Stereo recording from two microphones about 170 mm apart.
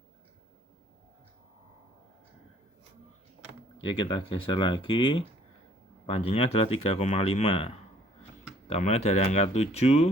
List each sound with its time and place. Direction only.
3.9 s speech: 30° left (ahead or behind)
8.7 s speech: 40° left (ahead or behind)